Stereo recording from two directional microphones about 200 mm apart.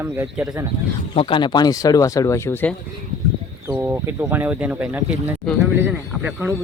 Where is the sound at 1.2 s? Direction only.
25° left (ahead or behind).